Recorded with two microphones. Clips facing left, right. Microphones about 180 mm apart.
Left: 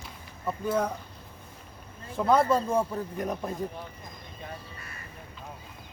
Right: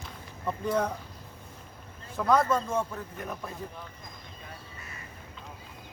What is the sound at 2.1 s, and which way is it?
Speech, 30° left (ahead or behind).